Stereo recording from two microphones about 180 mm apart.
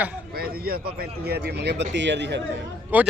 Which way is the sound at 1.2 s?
65° right (ahead or behind).